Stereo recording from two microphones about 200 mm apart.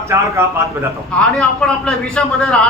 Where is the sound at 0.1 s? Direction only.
10° right (ahead or behind).